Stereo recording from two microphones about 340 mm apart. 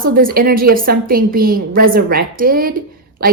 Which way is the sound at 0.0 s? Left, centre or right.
Right.